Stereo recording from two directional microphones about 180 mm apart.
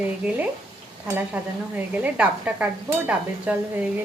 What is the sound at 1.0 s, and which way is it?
Speech, 10° right (ahead or behind).